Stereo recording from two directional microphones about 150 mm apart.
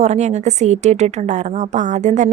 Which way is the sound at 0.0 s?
50° right (ahead or behind).